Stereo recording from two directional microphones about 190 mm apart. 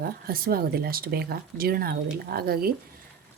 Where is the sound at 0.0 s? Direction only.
50° right (ahead or behind).